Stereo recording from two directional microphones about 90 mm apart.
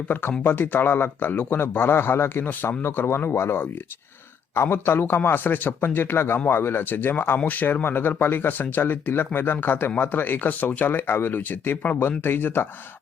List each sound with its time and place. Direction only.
0.1 s a man's voice: 25° left (ahead or behind)